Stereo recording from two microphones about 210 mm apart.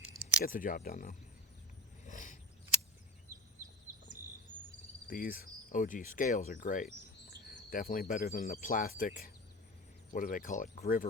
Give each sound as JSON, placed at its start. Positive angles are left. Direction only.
{"t": 0.4, "sound": "speech", "side_deg": 40}
{"t": 2.0, "sound": "a sound", "side_deg": 35}
{"t": 5.0, "sound": "speech", "side_deg": 40}